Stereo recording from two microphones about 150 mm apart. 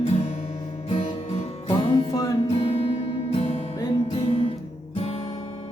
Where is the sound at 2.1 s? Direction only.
25° left (ahead or behind).